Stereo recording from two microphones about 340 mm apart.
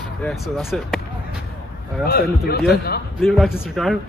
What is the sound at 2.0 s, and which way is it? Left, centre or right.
A man's voice, left.